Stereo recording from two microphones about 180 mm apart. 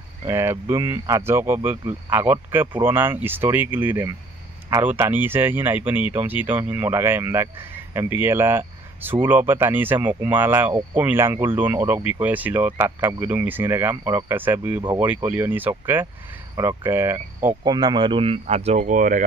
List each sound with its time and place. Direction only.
0.3 s speech: 15° right (ahead or behind)
17.6 s speech: 25° right (ahead or behind); by 19.2 s 45° right (ahead or behind)